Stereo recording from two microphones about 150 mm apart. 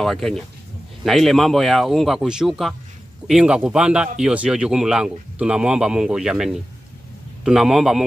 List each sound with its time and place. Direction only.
0.0 s speech: centre (ahead or behind)